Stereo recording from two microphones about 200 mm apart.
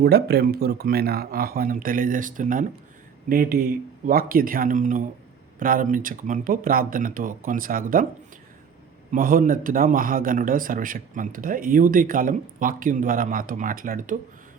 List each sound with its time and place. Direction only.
0.0 s speech: 55° right (ahead or behind)
9.1 s speech: 45° right (ahead or behind)